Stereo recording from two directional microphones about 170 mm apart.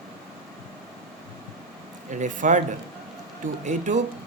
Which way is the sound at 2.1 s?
45° right (ahead or behind).